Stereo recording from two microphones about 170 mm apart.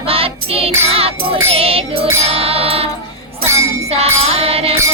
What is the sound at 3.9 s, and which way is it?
Music, 35° right (ahead or behind).